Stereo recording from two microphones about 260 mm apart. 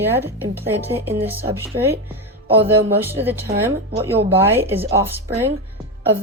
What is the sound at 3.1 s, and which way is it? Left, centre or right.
Speech, centre.